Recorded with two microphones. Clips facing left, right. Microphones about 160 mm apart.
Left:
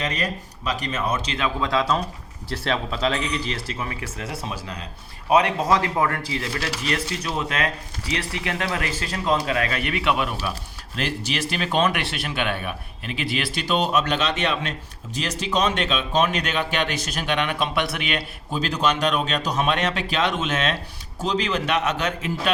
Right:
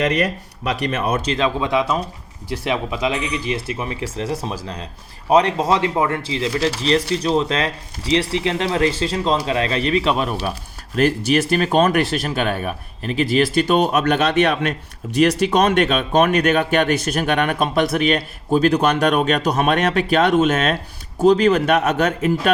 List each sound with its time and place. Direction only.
0.0 s speech: 65° right (ahead or behind)
1.5 s speech: 20° right (ahead or behind); by 10.5 s 40° right (ahead or behind)
10.9 s speech: 50° right (ahead or behind)